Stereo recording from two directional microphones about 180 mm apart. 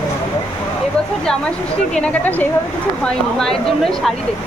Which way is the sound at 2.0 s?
10° left (ahead or behind).